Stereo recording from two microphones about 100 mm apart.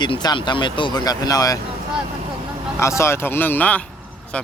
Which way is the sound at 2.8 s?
30° left (ahead or behind).